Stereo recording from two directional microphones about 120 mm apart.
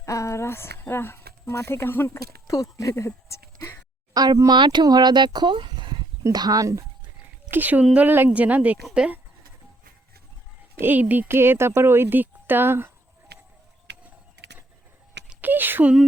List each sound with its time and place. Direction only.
0.0 s speech: 25° left (ahead or behind)
3.2 s a sound: 25° left (ahead or behind)
4.1 s speech: 30° right (ahead or behind)
7.5 s a woman's voice: 15° right (ahead or behind)
10.8 s speech: 15° right (ahead or behind)
15.3 s a sound: 15° right (ahead or behind)